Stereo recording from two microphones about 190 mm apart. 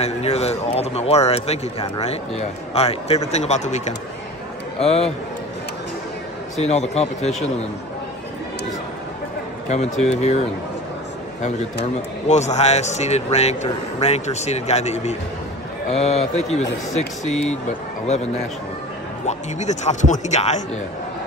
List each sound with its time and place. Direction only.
0.0 s speech: 35° left (ahead or behind)
6.5 s speech: 35° left (ahead or behind)
9.7 s speech: 35° left (ahead or behind)
11.8 s speech: 35° left (ahead or behind)
18.0 s speech: 35° left (ahead or behind)